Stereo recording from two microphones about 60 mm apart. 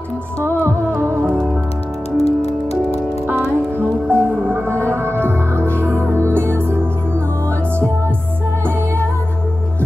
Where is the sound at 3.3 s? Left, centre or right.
Right.